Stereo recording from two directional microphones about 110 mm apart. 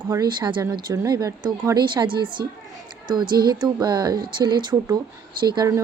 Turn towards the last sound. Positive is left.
turn(degrees=-40)  # may be behind; listen again after turning